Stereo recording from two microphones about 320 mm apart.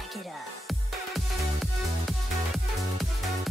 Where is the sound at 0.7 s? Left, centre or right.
Centre.